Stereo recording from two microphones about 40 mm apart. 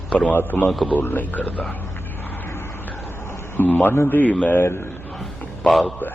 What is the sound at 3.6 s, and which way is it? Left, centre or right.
Speech, left.